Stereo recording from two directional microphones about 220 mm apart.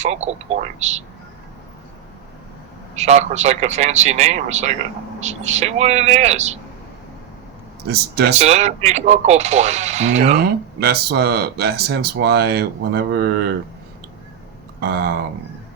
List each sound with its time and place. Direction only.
0.0 s speech: 30° right (ahead or behind)
2.9 s speech: 30° right (ahead or behind)
7.9 s speech: 45° right (ahead or behind)
8.3 s speech: 30° right (ahead or behind)
10.3 s speech: 45° right (ahead or behind)
14.8 s speech: 45° right (ahead or behind)